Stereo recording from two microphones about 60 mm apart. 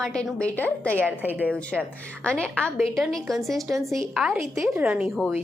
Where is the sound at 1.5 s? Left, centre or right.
Centre.